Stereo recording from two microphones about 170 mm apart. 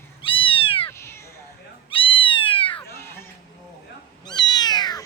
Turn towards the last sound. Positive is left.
turn(degrees=25)  # may be behind; listen again after turning